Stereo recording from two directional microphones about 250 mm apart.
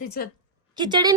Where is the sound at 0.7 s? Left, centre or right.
Centre.